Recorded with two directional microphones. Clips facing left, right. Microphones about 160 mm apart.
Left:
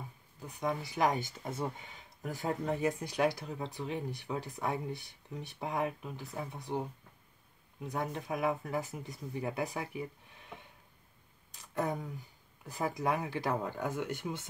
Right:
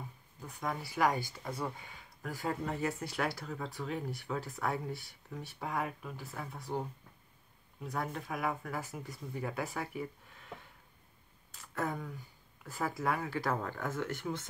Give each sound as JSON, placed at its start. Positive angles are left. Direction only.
{"t": 0.5, "sound": "speech", "side_deg": 20}
{"t": 7.8, "sound": "speech", "side_deg": 20}
{"t": 11.5, "sound": "a sound", "side_deg": 15}
{"t": 12.6, "sound": "speech", "side_deg": 15}